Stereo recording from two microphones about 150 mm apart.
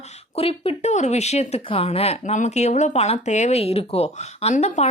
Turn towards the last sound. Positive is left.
turn(degrees=50)  # may be behind; listen again after turning